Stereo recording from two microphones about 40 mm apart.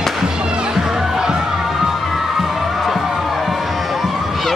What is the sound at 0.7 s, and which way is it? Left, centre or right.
Music, centre.